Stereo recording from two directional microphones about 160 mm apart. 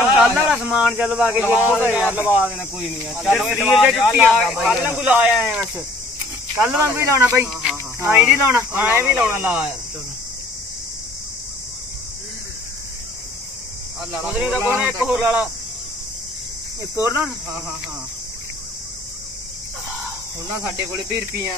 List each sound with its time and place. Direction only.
0.1 s speech: 10° right (ahead or behind)
7.0 s speech: 15° right (ahead or behind)
14.2 s speech: 10° right (ahead or behind)
16.9 s speech: 15° right (ahead or behind)